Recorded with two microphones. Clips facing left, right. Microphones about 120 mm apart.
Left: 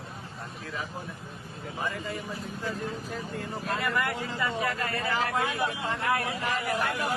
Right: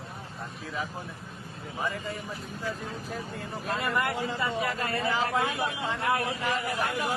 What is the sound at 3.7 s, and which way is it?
Speech, 20° right (ahead or behind).